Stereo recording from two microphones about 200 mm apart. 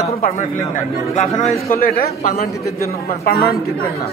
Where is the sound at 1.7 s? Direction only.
45° left (ahead or behind).